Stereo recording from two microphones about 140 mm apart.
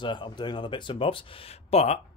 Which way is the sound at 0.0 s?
35° left (ahead or behind).